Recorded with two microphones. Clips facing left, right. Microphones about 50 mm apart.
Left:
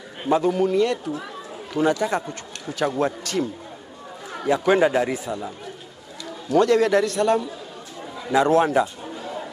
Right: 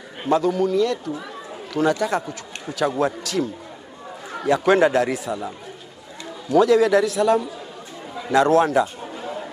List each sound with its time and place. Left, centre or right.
0.3 s a man's voice: centre
2.0 s a man's voice: centre
6.5 s a man's voice: centre
8.3 s a man's voice: centre
9.0 s chatter: centre